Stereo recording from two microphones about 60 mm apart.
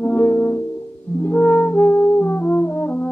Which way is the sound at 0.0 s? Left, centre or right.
Left.